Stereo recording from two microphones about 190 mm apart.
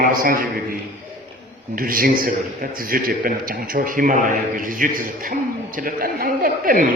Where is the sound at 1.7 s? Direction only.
50° right (ahead or behind).